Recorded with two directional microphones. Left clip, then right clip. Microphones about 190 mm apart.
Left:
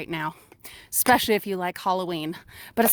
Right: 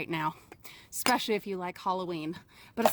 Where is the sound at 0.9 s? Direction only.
45° left (ahead or behind).